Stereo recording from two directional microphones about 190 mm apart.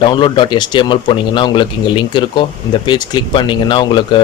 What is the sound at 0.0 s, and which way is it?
Speech, 25° left (ahead or behind).